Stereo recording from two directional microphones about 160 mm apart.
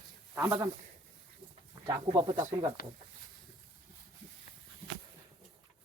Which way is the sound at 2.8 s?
65° left (ahead or behind).